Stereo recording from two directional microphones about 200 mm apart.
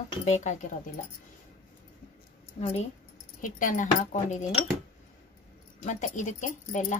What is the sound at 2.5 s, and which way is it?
A woman's voice, 35° left (ahead or behind).